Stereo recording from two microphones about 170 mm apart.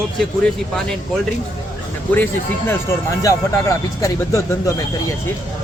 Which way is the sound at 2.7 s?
15° left (ahead or behind).